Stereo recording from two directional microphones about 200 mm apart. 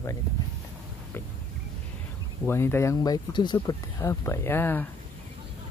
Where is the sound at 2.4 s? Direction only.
10° left (ahead or behind).